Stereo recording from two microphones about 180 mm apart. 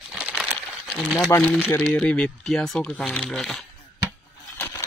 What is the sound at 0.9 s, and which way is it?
A man's voice, centre (ahead or behind).